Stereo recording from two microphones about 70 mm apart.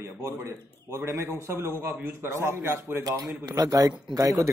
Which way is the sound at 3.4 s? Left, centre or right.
Right.